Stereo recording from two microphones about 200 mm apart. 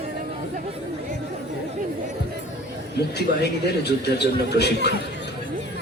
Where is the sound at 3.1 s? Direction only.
55° left (ahead or behind).